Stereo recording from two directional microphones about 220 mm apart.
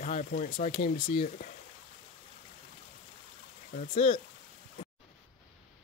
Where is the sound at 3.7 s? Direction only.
25° left (ahead or behind).